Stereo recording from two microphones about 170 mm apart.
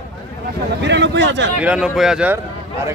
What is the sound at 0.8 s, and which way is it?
Speech, 90° right.